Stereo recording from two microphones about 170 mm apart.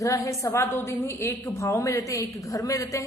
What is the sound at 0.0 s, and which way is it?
A woman's voice, 20° left (ahead or behind).